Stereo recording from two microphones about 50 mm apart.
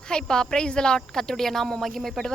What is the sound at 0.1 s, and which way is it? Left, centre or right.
Speech, centre.